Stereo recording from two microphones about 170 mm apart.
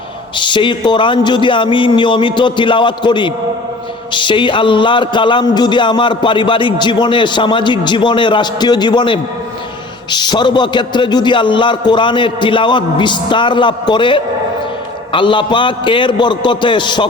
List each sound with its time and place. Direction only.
0.3 s a man's voice: 30° left (ahead or behind)